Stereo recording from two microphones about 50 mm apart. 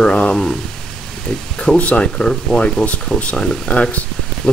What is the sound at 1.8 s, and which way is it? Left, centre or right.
Speech, left.